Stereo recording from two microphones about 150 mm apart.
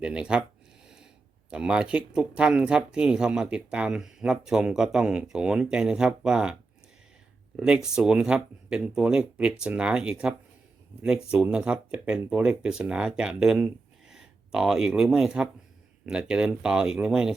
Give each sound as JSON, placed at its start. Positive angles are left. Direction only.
{"t": 0.0, "sound": "speech", "side_deg": -5}
{"t": 1.5, "sound": "speech", "side_deg": -5}